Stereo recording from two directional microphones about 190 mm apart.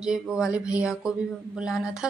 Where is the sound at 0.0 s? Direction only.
5° right (ahead or behind).